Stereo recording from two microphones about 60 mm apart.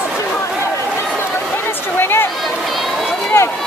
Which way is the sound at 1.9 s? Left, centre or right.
Left.